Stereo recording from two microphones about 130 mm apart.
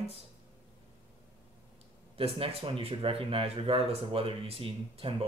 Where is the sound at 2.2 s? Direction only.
50° right (ahead or behind).